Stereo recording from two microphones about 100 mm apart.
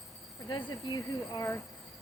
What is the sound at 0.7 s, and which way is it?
Speech, 40° left (ahead or behind).